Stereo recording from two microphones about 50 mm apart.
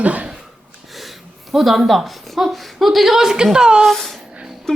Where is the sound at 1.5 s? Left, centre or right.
Centre.